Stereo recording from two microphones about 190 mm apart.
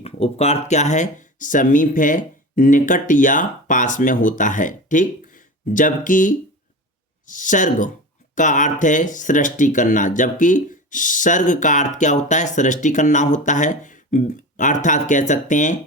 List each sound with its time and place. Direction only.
0.0 s speech: 35° left (ahead or behind)